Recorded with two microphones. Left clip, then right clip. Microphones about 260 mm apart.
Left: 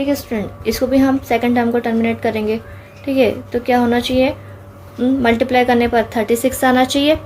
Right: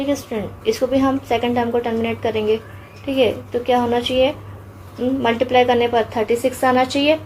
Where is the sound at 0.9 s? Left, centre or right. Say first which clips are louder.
Left 3 dB; left.